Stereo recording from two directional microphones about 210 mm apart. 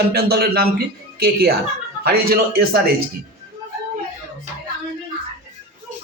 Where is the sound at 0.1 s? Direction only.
45° right (ahead or behind).